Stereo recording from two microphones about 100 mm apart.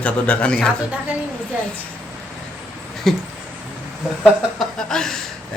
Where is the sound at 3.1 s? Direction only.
5° left (ahead or behind).